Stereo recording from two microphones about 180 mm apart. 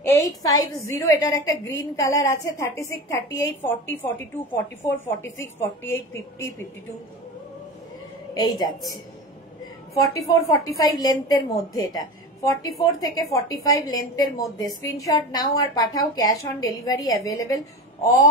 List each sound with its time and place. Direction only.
0.0 s a woman's voice: 20° left (ahead or behind)
8.4 s a woman's voice: 20° left (ahead or behind)
9.9 s a woman's voice: 15° left (ahead or behind)